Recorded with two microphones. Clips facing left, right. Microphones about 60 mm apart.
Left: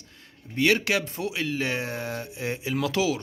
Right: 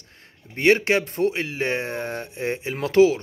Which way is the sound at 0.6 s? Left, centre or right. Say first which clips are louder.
Right 4 dB; right.